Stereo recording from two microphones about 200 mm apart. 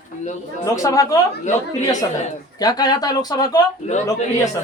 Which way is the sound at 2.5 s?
20° left (ahead or behind).